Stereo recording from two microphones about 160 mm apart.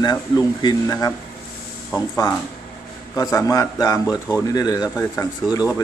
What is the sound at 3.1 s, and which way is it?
Speech, 20° left (ahead or behind).